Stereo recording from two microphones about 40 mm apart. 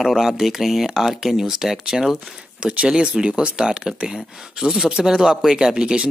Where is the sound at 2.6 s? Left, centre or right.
Right.